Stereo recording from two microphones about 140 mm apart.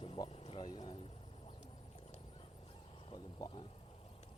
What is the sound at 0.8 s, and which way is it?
Speech, 45° left (ahead or behind).